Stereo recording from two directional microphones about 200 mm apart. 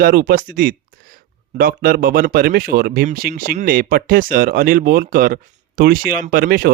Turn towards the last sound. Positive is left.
turn(degrees=-45)  # may be behind; listen again after turning